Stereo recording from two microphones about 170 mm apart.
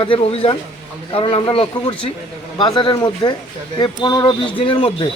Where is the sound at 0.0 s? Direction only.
35° left (ahead or behind).